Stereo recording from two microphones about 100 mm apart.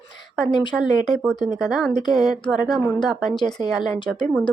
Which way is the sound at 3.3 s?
50° left (ahead or behind).